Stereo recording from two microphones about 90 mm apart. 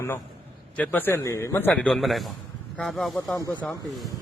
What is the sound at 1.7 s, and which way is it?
Speech, 10° left (ahead or behind).